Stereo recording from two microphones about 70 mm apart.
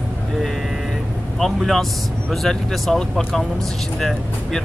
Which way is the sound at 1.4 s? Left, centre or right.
Centre.